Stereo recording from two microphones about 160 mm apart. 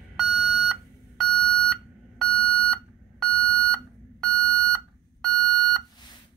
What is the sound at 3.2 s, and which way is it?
Beep, 5° left (ahead or behind).